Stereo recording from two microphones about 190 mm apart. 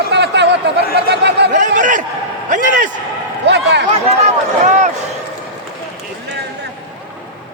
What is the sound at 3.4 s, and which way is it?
Speech, 65° right (ahead or behind).